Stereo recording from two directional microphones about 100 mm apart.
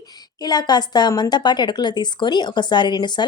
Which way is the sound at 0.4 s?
45° left (ahead or behind).